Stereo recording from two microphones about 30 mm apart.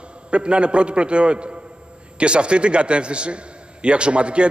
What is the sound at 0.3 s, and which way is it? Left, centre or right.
A man's voice, right.